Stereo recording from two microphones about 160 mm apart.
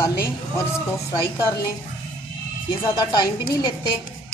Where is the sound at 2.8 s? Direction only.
25° left (ahead or behind).